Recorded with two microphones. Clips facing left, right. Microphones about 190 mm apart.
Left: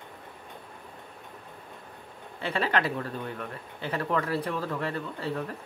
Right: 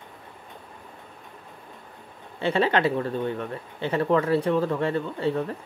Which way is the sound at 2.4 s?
30° right (ahead or behind).